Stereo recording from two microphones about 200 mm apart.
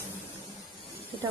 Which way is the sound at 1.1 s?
20° right (ahead or behind).